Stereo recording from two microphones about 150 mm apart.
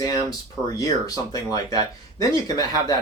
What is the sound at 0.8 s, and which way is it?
Speech, 25° left (ahead or behind).